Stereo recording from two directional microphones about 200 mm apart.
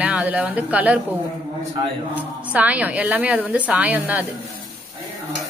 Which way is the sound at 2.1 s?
5° right (ahead or behind).